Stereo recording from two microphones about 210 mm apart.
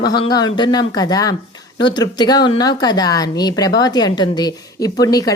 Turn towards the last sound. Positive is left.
turn(degrees=15)  # may be behind; listen again after turning